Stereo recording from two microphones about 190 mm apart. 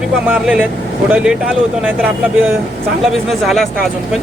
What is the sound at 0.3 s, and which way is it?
Speech, 5° right (ahead or behind).